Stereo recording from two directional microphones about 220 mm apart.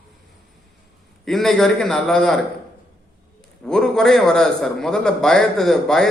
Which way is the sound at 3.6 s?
Centre (ahead or behind).